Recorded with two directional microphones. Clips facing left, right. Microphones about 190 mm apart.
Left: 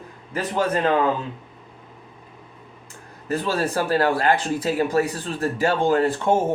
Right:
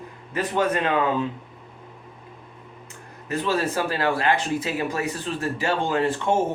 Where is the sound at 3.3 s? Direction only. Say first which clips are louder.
Left 1 dB; 40° left (ahead or behind).